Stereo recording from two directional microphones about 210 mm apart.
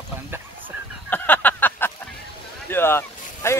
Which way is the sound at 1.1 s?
10° left (ahead or behind).